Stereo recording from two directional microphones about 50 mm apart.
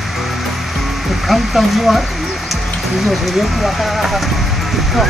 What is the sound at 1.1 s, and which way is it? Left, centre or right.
Speech, centre.